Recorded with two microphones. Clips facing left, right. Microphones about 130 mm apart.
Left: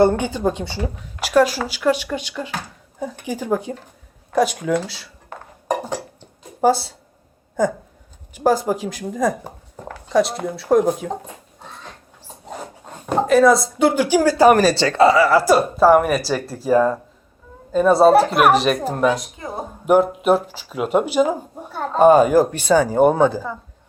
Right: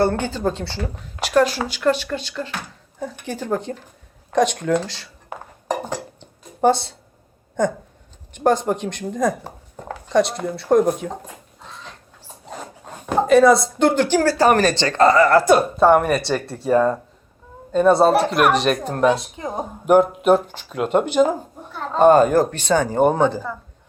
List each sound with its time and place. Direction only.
0.0 s speech: 15° left (ahead or behind)
5.3 s dishes: 10° right (ahead or behind)
6.1 s a sound: 5° left (ahead or behind)
7.6 s speech: 5° left (ahead or behind)
13.1 s speech: centre (ahead or behind)
19.1 s speech: 20° right (ahead or behind)
19.8 s speech: centre (ahead or behind)